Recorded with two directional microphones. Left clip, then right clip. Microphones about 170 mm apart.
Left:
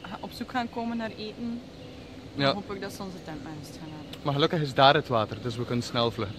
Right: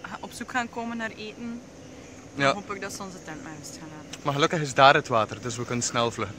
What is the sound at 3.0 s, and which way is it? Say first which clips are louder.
Speech: right 1 dB; 15° left (ahead or behind).